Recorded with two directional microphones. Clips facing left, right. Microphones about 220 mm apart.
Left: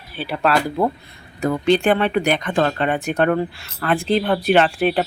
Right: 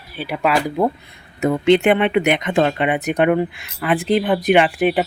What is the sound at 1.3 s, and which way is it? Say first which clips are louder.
Speech: right 3 dB; 25° right (ahead or behind).